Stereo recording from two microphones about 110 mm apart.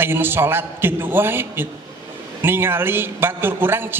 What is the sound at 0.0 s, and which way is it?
A man's voice, 20° right (ahead or behind).